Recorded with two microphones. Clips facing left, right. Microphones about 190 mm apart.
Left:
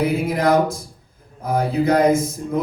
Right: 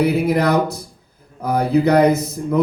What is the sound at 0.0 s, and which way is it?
A man's voice, 65° right (ahead or behind).